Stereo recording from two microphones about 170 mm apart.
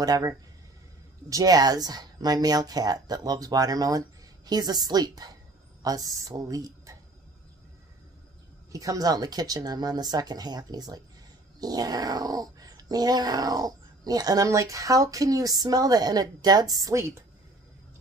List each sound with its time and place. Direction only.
0.0 s speech: 20° right (ahead or behind)
8.7 s speech: 20° right (ahead or behind)